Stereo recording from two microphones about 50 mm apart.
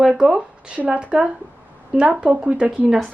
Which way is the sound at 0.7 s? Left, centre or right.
Right.